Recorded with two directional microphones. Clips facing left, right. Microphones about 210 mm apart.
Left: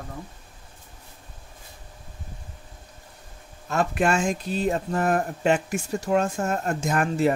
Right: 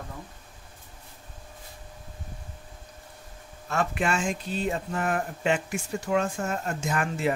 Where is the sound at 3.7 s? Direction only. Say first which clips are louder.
Left 4 dB; 40° left (ahead or behind).